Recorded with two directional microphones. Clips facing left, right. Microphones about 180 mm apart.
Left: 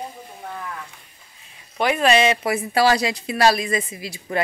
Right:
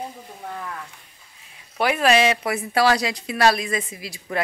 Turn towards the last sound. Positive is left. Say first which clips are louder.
# left 2 dB
turn(degrees=0)  # may be behind; listen again after turning